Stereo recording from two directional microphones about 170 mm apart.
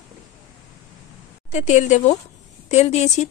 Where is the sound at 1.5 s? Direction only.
45° left (ahead or behind).